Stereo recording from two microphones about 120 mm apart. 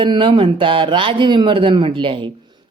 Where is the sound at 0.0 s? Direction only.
45° right (ahead or behind).